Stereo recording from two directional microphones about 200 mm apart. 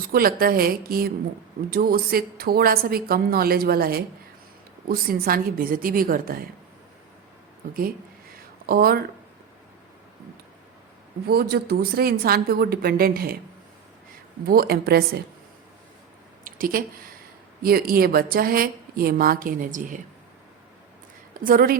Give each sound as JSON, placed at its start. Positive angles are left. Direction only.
{"t": 0.1, "sound": "a woman's voice", "side_deg": -45}
{"t": 7.7, "sound": "a woman's voice", "side_deg": -45}
{"t": 11.3, "sound": "a woman's voice", "side_deg": -50}
{"t": 14.4, "sound": "a woman's voice", "side_deg": -50}
{"t": 16.4, "sound": "a woman's voice", "side_deg": -45}
{"t": 21.3, "sound": "speech", "side_deg": -45}